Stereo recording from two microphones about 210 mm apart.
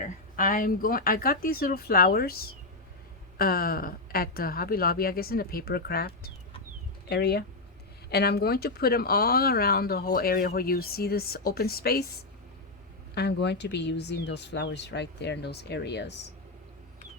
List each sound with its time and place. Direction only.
0.0 s speech: 40° left (ahead or behind)
13.1 s speech: 55° left (ahead or behind)